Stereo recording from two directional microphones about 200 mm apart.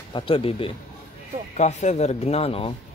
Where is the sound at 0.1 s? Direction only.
25° left (ahead or behind).